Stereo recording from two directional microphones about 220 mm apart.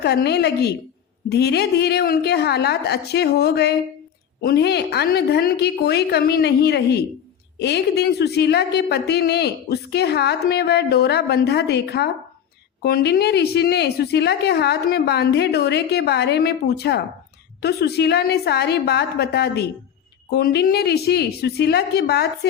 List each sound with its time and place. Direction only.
0.0 s a woman's voice: 50° left (ahead or behind)